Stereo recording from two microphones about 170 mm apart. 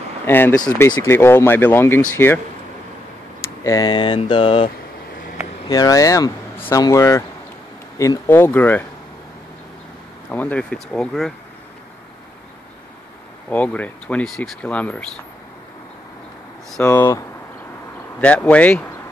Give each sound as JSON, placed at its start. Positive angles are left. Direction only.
{"t": 0.2, "sound": "speech", "side_deg": 10}
{"t": 3.6, "sound": "mantra", "side_deg": 20}
{"t": 5.7, "sound": "mantra", "side_deg": 20}
{"t": 6.7, "sound": "speech", "side_deg": 20}
{"t": 10.3, "sound": "speech", "side_deg": 10}
{"t": 13.5, "sound": "speech", "side_deg": 10}
{"t": 16.8, "sound": "speech", "side_deg": 15}
{"t": 18.2, "sound": "speech", "side_deg": 10}